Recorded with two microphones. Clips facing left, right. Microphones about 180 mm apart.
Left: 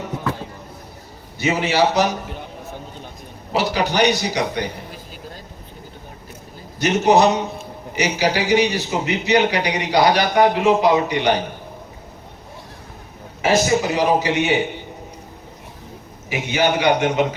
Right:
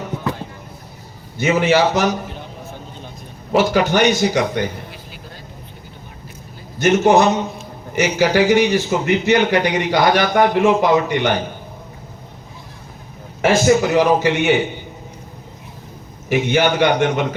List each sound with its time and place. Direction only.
1.4 s a man's voice: 50° right (ahead or behind)
3.5 s a man's voice: 50° right (ahead or behind)
6.7 s a man's voice: 50° right (ahead or behind)
13.4 s a man's voice: 50° right (ahead or behind)
16.3 s a man's voice: 50° right (ahead or behind)